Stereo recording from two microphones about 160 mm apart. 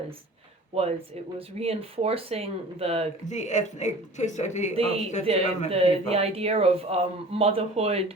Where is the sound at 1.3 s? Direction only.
40° right (ahead or behind).